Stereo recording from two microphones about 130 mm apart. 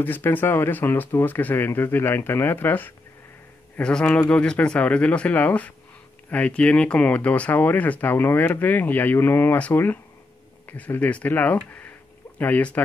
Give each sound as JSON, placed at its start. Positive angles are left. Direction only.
{"t": 0.0, "sound": "speech", "side_deg": 15}